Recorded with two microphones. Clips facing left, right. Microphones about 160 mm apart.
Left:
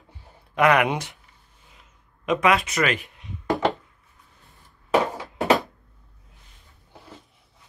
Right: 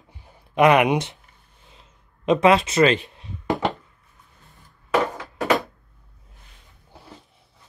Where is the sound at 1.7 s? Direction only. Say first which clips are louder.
Right 2 dB; 30° right (ahead or behind).